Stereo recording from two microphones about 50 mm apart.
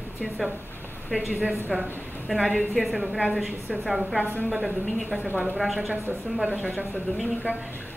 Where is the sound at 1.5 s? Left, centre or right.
Centre.